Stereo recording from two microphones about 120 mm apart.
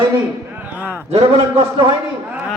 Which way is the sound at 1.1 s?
60° right (ahead or behind).